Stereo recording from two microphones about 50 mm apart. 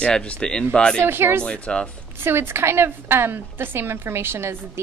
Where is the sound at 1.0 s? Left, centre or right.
Right.